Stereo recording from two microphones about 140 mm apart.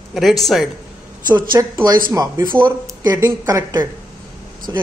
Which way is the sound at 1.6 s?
20° right (ahead or behind).